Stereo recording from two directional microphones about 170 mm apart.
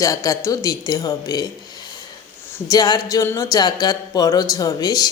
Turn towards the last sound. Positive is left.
turn(degrees=25)  # may be behind; listen again after turning